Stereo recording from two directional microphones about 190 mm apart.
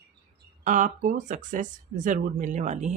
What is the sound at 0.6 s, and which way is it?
Speech, 40° right (ahead or behind).